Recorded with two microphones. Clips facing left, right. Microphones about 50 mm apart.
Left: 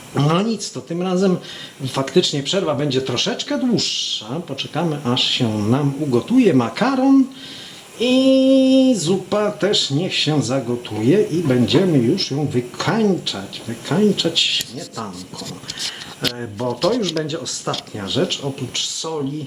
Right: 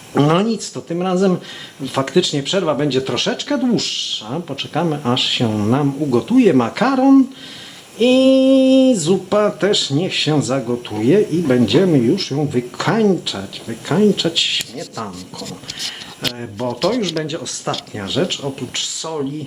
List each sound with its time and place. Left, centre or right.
0.1 s speech: centre
16.8 s speech: right
18.0 s speech: centre